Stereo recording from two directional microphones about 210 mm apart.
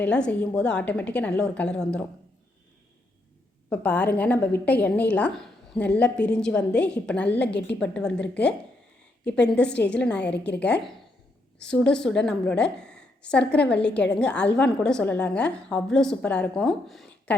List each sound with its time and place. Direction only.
0.0 s a woman's voice: 5° left (ahead or behind)
3.7 s a woman's voice: 5° left (ahead or behind)
10.2 s a woman's voice: 55° left (ahead or behind)
11.6 s a woman's voice: 5° left (ahead or behind)